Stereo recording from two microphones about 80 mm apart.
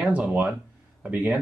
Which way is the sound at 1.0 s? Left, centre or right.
Right.